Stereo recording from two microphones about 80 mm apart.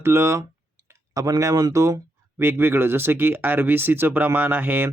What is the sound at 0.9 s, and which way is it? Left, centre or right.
Speech, right.